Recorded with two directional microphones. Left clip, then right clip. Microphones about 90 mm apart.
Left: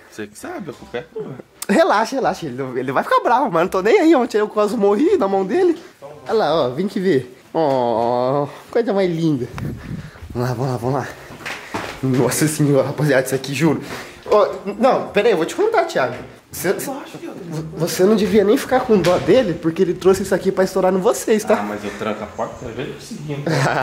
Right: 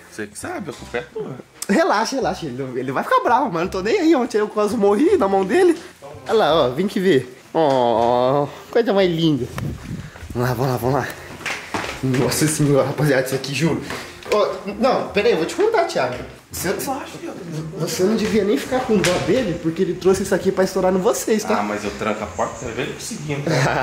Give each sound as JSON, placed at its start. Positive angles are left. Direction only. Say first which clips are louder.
{"t": 0.2, "sound": "speech", "louder": "right 1 dB", "side_deg": 15}
{"t": 2.2, "sound": "speech", "louder": "left 3 dB", "side_deg": 35}
{"t": 3.0, "sound": "speech", "louder": "left 1 dB", "side_deg": 15}
{"t": 3.4, "sound": "a man's voice", "louder": "left 5 dB", "side_deg": 35}
{"t": 10.4, "sound": "speech", "louder": "right 1 dB", "side_deg": 15}
{"t": 12.3, "sound": "speech", "louder": "left 1 dB", "side_deg": 25}
{"t": 13.2, "sound": "speech", "louder": "left 2 dB", "side_deg": 35}
{"t": 16.6, "sound": "speech", "louder": "left 2 dB", "side_deg": 35}
{"t": 20.1, "sound": "speech", "louder": "even", "side_deg": 15}
{"t": 22.0, "sound": "speech", "louder": "right 1 dB", "side_deg": 15}